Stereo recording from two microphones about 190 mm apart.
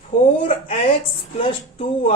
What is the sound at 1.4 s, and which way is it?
Speech, 30° left (ahead or behind).